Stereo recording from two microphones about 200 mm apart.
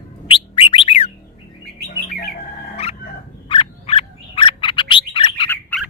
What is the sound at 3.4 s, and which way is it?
Bird, 30° left (ahead or behind).